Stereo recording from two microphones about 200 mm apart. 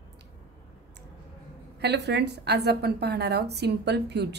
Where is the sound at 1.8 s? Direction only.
55° right (ahead or behind).